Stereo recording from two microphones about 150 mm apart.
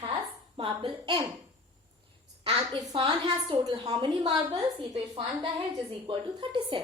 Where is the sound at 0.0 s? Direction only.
35° right (ahead or behind).